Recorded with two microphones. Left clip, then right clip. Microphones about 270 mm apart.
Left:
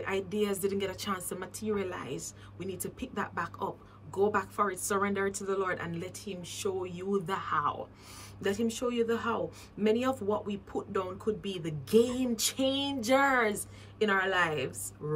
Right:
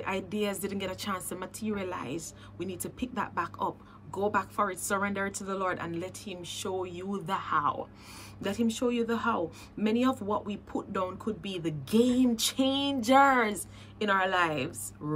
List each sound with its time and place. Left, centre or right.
0.0 s a woman's voice: centre